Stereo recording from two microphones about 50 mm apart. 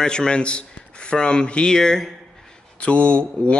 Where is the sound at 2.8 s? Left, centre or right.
Left.